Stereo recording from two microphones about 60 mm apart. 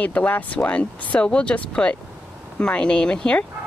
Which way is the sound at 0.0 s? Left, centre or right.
Left.